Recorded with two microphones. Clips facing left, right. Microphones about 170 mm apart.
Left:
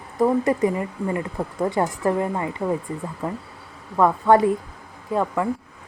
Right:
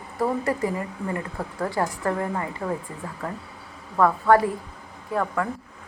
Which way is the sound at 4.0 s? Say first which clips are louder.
Left 2 dB; 20° left (ahead or behind).